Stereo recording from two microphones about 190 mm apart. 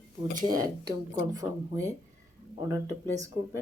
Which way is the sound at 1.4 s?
15° right (ahead or behind).